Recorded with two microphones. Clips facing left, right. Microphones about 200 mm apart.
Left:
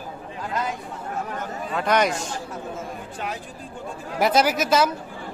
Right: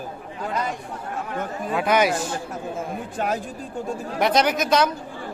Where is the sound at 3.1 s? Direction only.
45° right (ahead or behind).